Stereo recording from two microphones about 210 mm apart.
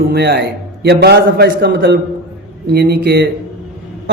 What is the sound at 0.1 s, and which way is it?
A man's voice, 50° right (ahead or behind).